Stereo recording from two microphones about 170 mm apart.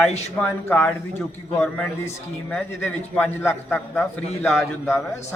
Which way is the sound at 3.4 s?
15° left (ahead or behind).